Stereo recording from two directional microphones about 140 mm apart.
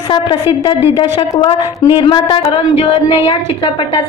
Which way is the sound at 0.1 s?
35° left (ahead or behind).